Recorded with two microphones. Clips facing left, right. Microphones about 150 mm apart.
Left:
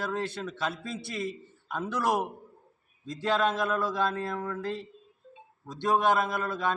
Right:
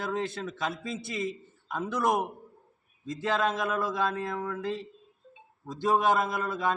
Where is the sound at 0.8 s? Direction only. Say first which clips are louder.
Right 1 dB; 20° right (ahead or behind).